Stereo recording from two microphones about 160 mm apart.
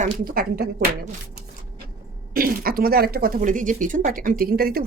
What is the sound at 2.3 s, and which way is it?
Speech, 65° right (ahead or behind).